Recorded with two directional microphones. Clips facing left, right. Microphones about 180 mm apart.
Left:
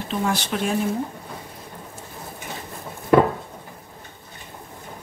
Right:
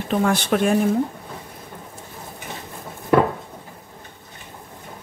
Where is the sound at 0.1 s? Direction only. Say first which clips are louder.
Right 5 dB; 55° right (ahead or behind).